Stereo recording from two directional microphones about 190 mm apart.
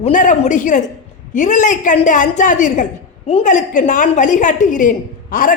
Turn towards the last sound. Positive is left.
turn(degrees=45)  # may be behind; listen again after turning